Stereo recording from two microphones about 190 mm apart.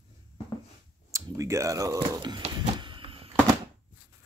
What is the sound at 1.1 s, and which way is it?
Finger snapping, 15° right (ahead or behind).